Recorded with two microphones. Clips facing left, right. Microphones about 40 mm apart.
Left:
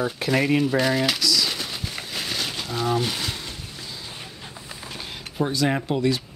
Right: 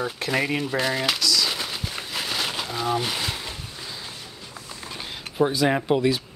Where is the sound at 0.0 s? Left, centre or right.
Centre.